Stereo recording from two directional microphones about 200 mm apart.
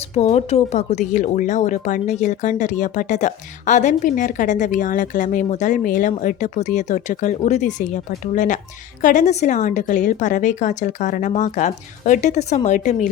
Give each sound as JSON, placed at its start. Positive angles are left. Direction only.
{"t": 0.1, "sound": "speech", "side_deg": 35}